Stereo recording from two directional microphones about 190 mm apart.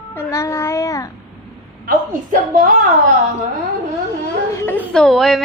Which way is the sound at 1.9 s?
45° right (ahead or behind).